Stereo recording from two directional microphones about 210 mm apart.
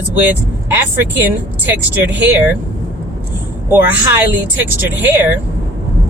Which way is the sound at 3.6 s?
10° right (ahead or behind).